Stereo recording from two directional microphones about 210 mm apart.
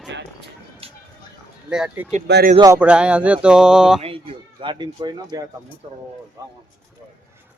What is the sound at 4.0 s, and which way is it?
Speech, 25° right (ahead or behind).